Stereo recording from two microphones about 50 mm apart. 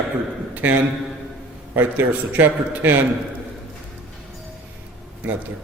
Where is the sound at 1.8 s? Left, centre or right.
Right.